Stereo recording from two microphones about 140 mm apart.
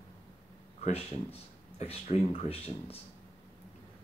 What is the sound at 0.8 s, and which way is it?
Speech, 50° left (ahead or behind).